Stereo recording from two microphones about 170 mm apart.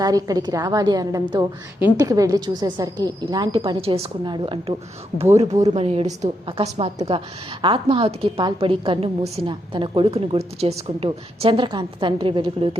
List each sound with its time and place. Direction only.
0.0 s a woman's voice: 20° right (ahead or behind)